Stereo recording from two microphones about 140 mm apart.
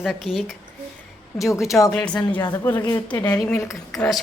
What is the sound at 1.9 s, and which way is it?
A woman's voice, 10° left (ahead or behind).